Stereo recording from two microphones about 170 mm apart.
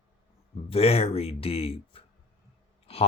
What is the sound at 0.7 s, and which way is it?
Speech, 35° left (ahead or behind).